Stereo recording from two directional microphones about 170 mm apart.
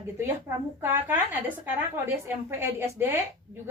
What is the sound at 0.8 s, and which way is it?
A woman's voice, 10° right (ahead or behind).